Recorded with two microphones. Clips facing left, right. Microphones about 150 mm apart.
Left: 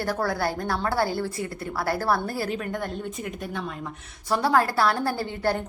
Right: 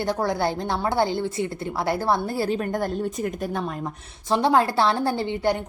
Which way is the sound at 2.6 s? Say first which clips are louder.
Right 5 dB; 40° right (ahead or behind).